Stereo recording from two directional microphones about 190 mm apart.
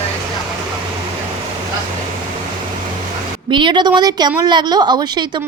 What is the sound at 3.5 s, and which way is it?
A woman's voice, 25° right (ahead or behind).